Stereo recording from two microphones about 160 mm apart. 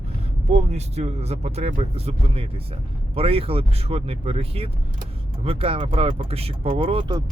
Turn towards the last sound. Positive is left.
turn(degrees=-30)  # may be behind; listen again after turning